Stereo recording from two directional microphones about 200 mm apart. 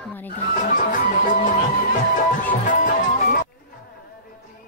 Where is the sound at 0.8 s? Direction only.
40° left (ahead or behind).